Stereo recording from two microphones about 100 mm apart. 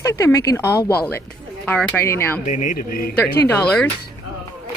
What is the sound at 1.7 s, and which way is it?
A woman's voice, 15° left (ahead or behind).